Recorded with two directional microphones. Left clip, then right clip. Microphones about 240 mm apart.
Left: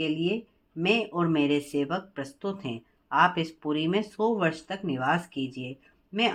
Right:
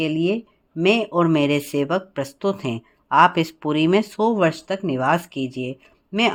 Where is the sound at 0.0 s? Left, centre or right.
Right.